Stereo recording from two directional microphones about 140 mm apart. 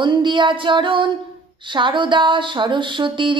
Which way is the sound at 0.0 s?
35° right (ahead or behind).